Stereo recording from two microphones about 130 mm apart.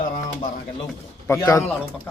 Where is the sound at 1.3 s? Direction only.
25° left (ahead or behind).